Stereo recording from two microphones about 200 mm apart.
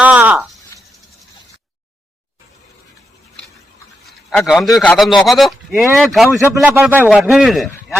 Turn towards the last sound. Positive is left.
turn(degrees=0)  # may be behind; listen again after turning